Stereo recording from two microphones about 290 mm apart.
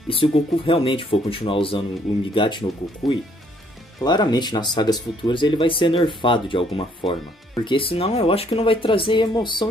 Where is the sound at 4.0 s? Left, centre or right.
Centre.